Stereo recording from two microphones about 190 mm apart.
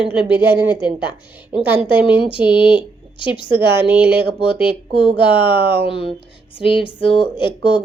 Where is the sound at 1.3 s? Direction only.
10° right (ahead or behind).